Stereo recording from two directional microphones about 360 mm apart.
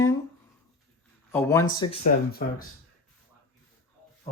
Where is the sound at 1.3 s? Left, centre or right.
Centre.